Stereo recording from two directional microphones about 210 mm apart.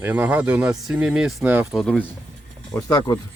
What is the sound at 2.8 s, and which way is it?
Speech, 15° left (ahead or behind).